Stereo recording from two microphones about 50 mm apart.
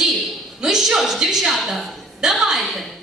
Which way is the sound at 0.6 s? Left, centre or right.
Centre.